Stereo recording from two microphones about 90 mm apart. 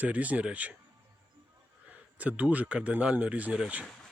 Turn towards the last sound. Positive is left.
turn(degrees=-15)  # may be behind; listen again after turning